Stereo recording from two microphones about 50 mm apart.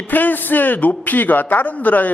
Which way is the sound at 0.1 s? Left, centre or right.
Left.